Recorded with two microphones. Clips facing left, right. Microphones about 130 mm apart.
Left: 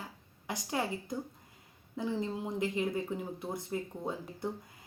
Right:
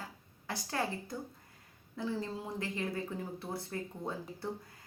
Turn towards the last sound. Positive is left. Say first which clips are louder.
# left 3 dB
turn(degrees=15)  # may be behind; listen again after turning